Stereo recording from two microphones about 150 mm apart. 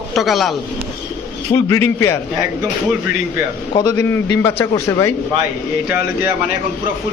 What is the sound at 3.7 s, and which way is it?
Speech, 25° left (ahead or behind).